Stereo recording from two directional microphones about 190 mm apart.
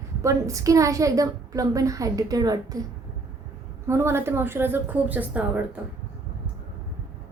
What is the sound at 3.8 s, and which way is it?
A woman's voice, 15° right (ahead or behind).